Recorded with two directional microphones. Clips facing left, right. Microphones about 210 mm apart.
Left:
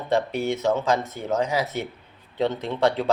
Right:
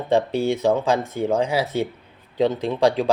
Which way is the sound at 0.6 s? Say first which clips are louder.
Right 3 dB; 15° right (ahead or behind).